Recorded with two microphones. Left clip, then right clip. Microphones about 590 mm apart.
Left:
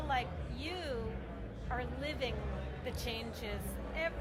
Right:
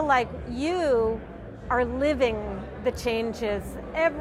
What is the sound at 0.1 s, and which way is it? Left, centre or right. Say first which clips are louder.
A woman's voice: right 13 dB; right.